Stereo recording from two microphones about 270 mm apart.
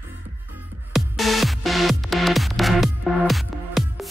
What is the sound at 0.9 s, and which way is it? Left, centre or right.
Music, centre.